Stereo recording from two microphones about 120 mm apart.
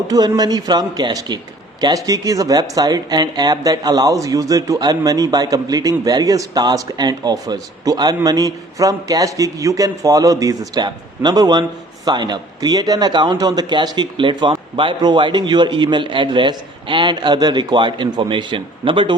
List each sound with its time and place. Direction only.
0.1 s speech: 35° right (ahead or behind)